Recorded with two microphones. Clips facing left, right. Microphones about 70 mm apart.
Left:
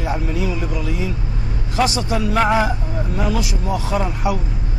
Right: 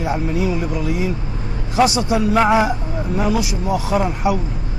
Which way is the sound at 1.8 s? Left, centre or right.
Centre.